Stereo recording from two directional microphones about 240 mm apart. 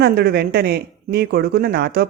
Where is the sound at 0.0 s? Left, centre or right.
Right.